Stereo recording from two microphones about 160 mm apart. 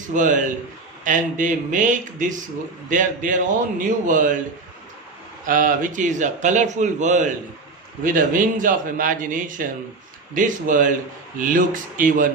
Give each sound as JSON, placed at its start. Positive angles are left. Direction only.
{"t": 0.1, "sound": "speech", "side_deg": -55}
{"t": 5.5, "sound": "a man's voice", "side_deg": -55}